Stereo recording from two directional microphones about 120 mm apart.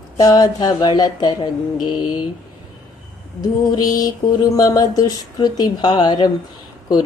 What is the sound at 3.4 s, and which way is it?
Speech, 30° left (ahead or behind).